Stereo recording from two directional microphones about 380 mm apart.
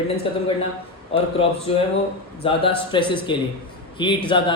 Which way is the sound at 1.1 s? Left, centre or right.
Centre.